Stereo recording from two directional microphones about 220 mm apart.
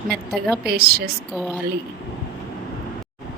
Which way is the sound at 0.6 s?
45° right (ahead or behind).